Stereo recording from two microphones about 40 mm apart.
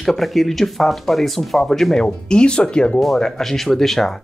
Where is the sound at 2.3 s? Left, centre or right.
Left.